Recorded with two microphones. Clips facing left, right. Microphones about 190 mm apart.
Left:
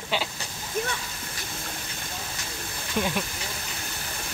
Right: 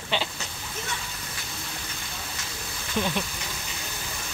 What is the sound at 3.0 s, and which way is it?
Speech, 10° left (ahead or behind).